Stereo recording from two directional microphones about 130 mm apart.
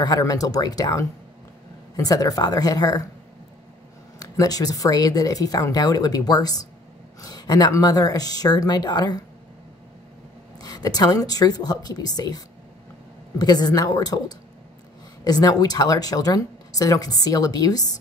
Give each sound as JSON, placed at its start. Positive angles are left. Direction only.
{"t": 0.0, "sound": "speech", "side_deg": 30}
{"t": 4.2, "sound": "speech", "side_deg": 30}
{"t": 10.6, "sound": "speech", "side_deg": 30}
{"t": 13.4, "sound": "speech", "side_deg": 30}
{"t": 15.2, "sound": "speech", "side_deg": 30}